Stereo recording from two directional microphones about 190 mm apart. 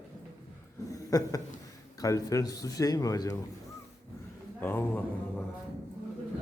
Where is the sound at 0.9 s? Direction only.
20° left (ahead or behind).